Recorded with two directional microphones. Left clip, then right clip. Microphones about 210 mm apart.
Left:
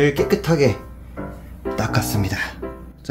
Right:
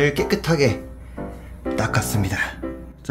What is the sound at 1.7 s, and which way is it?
Speech, 10° left (ahead or behind).